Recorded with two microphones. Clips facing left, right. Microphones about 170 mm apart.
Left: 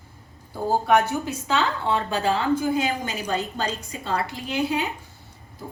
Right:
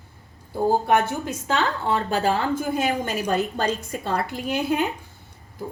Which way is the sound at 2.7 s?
50° right (ahead or behind).